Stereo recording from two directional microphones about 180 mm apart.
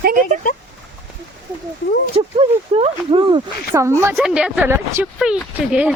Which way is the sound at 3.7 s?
15° right (ahead or behind).